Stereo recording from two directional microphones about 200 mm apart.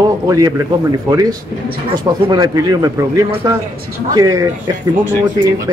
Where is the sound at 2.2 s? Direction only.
20° right (ahead or behind).